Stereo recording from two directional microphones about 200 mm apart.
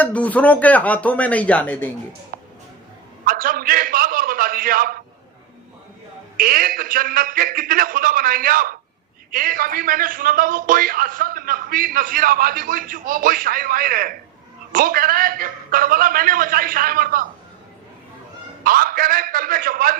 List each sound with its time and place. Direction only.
0.0 s speech: 5° left (ahead or behind)
2.3 s a sound: 45° right (ahead or behind)
6.3 s a man's voice: 45° right (ahead or behind)
18.6 s a man's voice: 45° right (ahead or behind)